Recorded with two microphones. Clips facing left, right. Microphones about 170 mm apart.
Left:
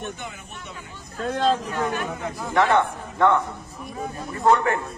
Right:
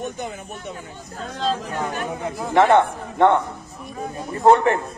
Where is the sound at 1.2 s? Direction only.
60° left (ahead or behind).